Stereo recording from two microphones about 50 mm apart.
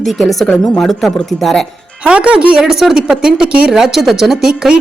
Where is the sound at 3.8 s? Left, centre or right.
Centre.